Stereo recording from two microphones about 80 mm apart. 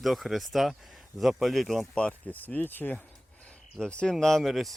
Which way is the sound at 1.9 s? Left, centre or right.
Centre.